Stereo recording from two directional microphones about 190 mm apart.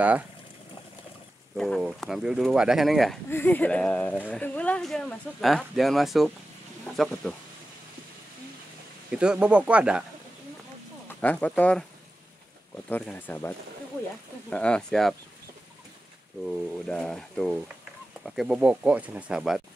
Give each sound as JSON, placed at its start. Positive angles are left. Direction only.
{"t": 1.6, "sound": "speech", "side_deg": 0}
{"t": 3.3, "sound": "speech", "side_deg": 10}
{"t": 9.1, "sound": "speech", "side_deg": -5}
{"t": 11.1, "sound": "speech", "side_deg": 10}
{"t": 12.9, "sound": "speech", "side_deg": 10}
{"t": 16.4, "sound": "speech", "side_deg": 0}